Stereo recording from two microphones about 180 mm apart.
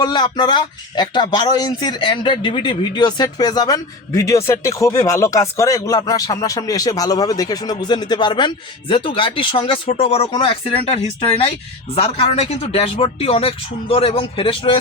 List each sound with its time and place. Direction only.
0.0 s speech: 25° left (ahead or behind)
11.9 s speech: 35° left (ahead or behind)